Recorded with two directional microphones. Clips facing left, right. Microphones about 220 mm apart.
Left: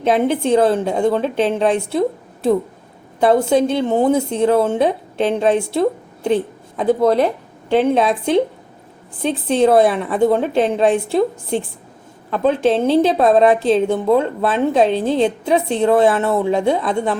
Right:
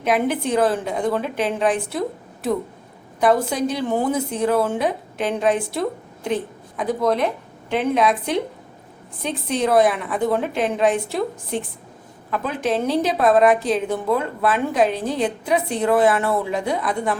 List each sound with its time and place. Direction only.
0.0 s a woman's voice: 25° left (ahead or behind)